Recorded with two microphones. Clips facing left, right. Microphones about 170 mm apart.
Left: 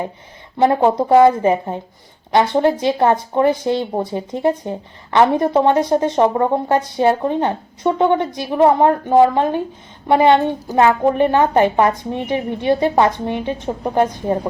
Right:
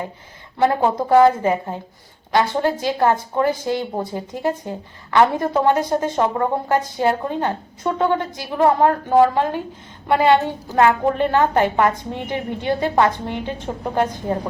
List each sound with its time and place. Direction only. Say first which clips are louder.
0.5 s speech: left 4 dB; 20° left (ahead or behind)